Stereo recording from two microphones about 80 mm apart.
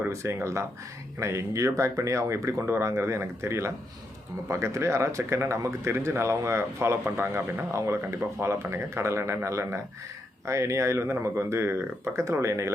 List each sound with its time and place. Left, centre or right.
0.1 s speech: right